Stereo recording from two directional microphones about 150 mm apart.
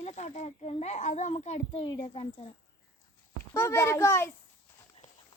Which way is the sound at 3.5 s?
20° left (ahead or behind).